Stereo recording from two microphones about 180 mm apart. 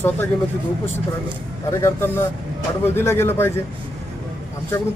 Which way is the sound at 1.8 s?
15° left (ahead or behind).